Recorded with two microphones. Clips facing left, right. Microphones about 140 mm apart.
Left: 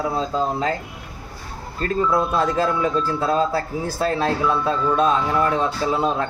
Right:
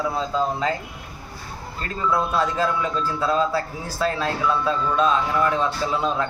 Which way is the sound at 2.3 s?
40° left (ahead or behind).